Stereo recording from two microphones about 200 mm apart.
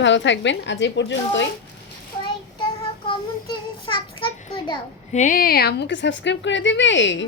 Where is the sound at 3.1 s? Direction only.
25° left (ahead or behind).